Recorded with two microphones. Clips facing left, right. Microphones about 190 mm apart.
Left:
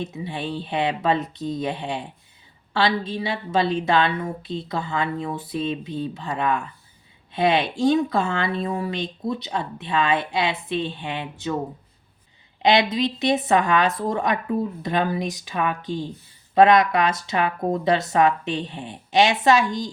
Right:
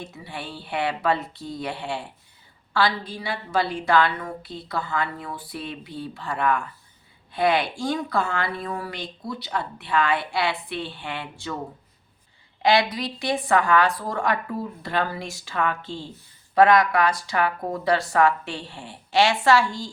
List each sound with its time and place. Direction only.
0.0 s speech: 20° left (ahead or behind)
12.6 s speech: 20° left (ahead or behind)